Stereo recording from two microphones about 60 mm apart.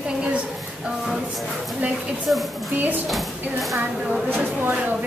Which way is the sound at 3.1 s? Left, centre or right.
Centre.